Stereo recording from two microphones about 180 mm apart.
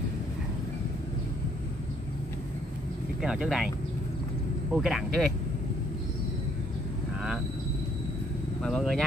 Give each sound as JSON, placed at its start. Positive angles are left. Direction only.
{"t": 3.2, "sound": "speech", "side_deg": -5}
{"t": 4.7, "sound": "speech", "side_deg": 0}
{"t": 8.6, "sound": "speech", "side_deg": 0}